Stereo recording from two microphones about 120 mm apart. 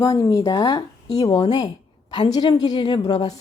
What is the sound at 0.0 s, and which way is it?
A woman's voice, 30° left (ahead or behind).